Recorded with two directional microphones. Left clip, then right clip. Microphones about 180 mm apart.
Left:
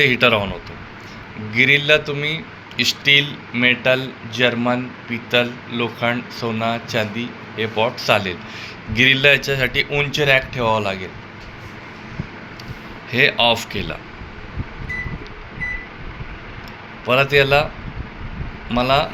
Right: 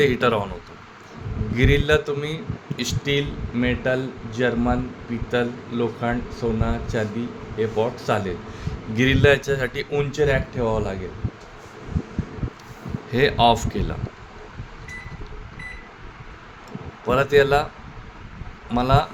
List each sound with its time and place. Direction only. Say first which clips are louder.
0.0 s speech: left 5 dB; 40° right (ahead or behind)
1.5 s speech: left 6 dB; 45° right (ahead or behind)
13.1 s speech: left 2 dB; 45° right (ahead or behind)
17.1 s speech: left 3 dB; 45° right (ahead or behind)
18.7 s speech: left 3 dB; 45° right (ahead or behind)